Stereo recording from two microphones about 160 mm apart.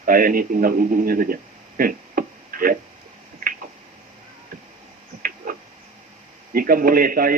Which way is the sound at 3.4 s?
70° right (ahead or behind).